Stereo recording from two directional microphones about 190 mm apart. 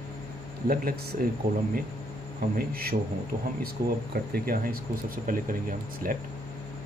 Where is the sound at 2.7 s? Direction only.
55° right (ahead or behind).